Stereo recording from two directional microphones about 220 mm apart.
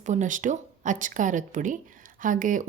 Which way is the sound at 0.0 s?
35° right (ahead or behind).